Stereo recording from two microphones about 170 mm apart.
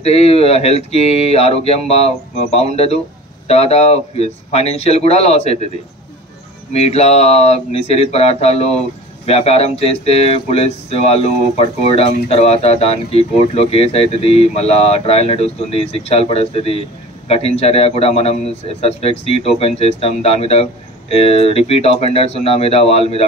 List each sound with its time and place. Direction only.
0.0 s speech: 35° left (ahead or behind)
6.7 s speech: 40° left (ahead or behind)